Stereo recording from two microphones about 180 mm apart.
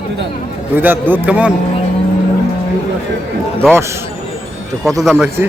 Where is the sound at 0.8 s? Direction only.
10° right (ahead or behind).